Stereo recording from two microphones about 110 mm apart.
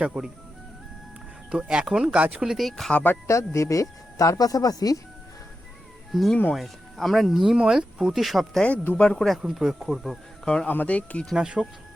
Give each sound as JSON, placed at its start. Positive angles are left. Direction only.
{"t": 0.0, "sound": "speech", "side_deg": -10}
{"t": 1.5, "sound": "speech", "side_deg": -10}
{"t": 3.0, "sound": "speech", "side_deg": 20}
{"t": 6.1, "sound": "speech", "side_deg": 0}
{"t": 8.6, "sound": "speech", "side_deg": 15}
{"t": 11.3, "sound": "speech", "side_deg": -10}